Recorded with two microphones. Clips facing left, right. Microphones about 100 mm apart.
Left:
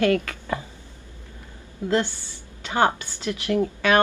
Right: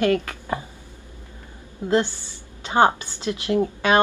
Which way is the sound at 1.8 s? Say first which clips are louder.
Right 2 dB; 20° right (ahead or behind).